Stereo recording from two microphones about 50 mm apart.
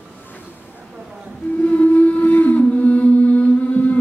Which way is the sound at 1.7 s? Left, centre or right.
Left.